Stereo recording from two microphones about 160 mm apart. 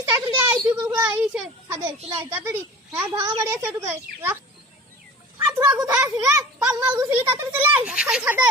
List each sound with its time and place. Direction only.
0.0 s a woman's voice: 15° right (ahead or behind)
5.5 s a child's voice: 20° right (ahead or behind)